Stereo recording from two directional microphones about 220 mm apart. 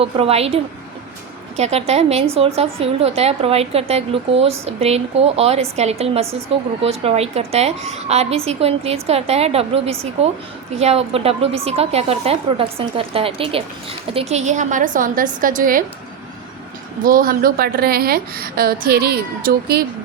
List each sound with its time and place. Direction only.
0.0 s a woman's voice: 25° right (ahead or behind)
17.0 s a woman's voice: 40° right (ahead or behind)